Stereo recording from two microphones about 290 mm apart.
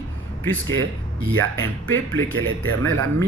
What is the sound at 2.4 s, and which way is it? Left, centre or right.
Speech, right.